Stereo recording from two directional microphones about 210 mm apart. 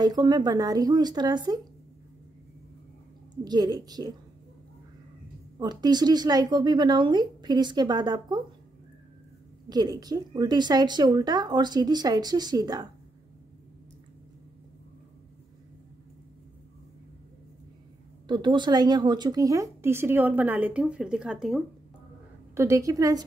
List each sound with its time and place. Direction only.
0.0 s a woman's voice: 20° right (ahead or behind)
3.4 s a woman's voice: 20° right (ahead or behind)
5.6 s a woman's voice: 20° right (ahead or behind)
9.7 s a woman's voice: 20° right (ahead or behind)
18.2 s a woman's voice: 20° right (ahead or behind); by 21.6 s centre (ahead or behind)
22.6 s a woman's voice: 15° right (ahead or behind)